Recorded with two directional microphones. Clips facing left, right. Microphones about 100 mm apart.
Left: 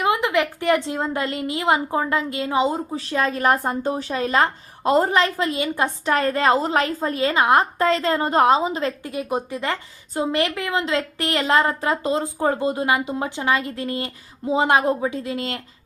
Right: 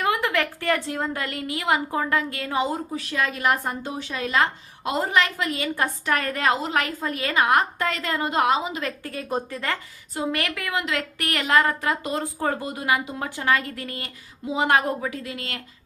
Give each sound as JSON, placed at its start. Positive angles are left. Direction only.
{"t": 0.0, "sound": "a woman's voice", "side_deg": 20}
{"t": 9.0, "sound": "a woman's voice", "side_deg": 15}